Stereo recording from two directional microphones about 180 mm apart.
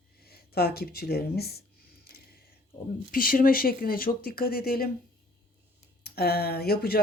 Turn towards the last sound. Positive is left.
turn(degrees=60)  # may be behind; listen again after turning